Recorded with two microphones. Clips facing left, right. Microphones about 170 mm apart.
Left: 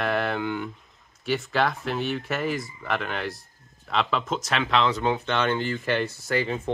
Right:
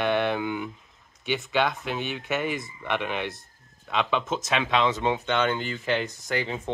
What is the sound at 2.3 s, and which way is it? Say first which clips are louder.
Speech: left 1 dB; centre (ahead or behind).